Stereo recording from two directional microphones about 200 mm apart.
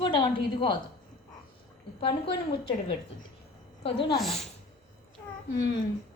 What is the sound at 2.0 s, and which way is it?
Speech, 25° left (ahead or behind).